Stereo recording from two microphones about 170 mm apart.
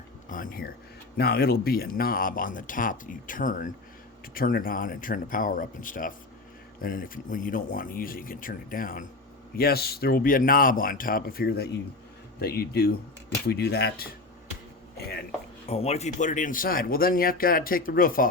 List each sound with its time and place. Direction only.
0.3 s speech: 55° left (ahead or behind)
1.1 s speech: 65° left (ahead or behind)
14.9 s a sound: 65° left (ahead or behind)
15.6 s speech: 35° left (ahead or behind); by 18.3 s 55° left (ahead or behind)